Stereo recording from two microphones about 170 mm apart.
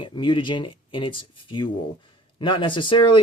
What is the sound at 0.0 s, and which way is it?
Speech, 30° left (ahead or behind).